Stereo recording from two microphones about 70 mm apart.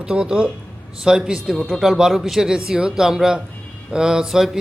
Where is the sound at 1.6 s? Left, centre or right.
Centre.